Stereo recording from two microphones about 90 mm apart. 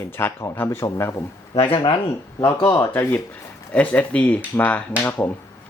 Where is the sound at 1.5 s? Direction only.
90° left.